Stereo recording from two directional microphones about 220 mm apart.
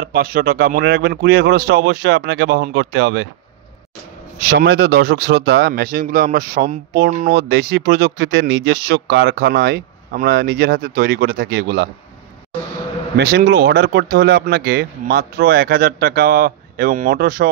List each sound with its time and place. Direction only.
0.0 s speech: 40° right (ahead or behind)
4.5 s speech: 45° right (ahead or behind)
13.1 s speech: 45° right (ahead or behind)